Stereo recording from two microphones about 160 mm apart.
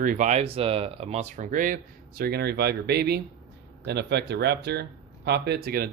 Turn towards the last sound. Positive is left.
turn(degrees=-70)  # may be behind; listen again after turning